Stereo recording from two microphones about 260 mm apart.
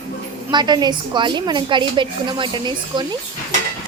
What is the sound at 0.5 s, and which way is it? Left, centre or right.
A woman's voice, centre.